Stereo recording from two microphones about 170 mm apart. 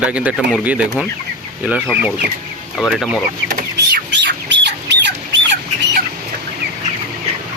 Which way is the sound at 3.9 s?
90° right.